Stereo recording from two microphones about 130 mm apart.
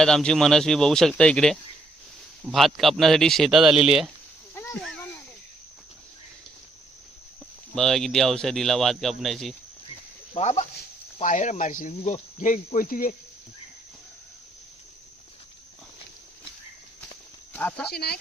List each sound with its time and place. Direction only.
0.0 s speech: 5° left (ahead or behind)
4.7 s a sound: 5° left (ahead or behind)
7.8 s speech: 5° left (ahead or behind)
10.3 s speech: 60° left (ahead or behind)
11.2 s speech: 75° left (ahead or behind); by 13.1 s 90° left
17.5 s speech: 10° left (ahead or behind)